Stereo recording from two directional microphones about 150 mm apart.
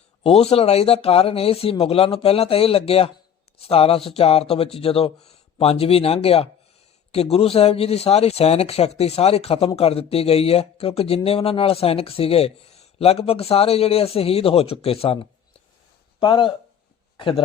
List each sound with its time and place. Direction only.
0.2 s a man's voice: 40° left (ahead or behind)